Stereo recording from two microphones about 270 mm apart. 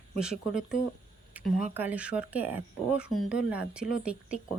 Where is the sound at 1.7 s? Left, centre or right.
Centre.